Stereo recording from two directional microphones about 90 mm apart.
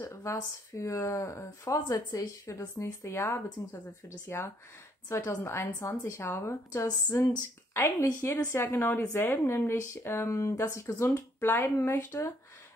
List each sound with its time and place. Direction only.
0.0 s speech: 30° left (ahead or behind)